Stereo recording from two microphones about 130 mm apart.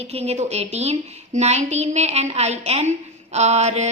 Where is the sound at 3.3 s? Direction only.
60° right (ahead or behind).